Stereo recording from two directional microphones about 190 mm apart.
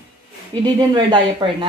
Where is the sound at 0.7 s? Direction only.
25° right (ahead or behind).